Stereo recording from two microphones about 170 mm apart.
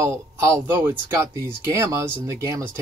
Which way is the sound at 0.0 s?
15° right (ahead or behind).